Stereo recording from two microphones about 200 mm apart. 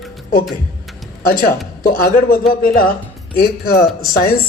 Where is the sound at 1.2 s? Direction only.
45° left (ahead or behind).